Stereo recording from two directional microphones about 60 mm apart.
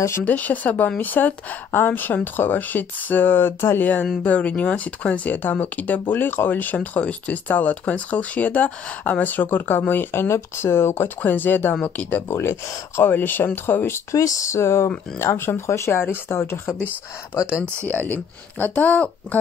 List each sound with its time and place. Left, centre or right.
0.2 s speech: left
10.2 s speech: left
11.7 s speech: left
12.1 s speech: left
14.1 s speech: left
15.3 s speech: left
15.6 s speech: left
17.8 s speech: left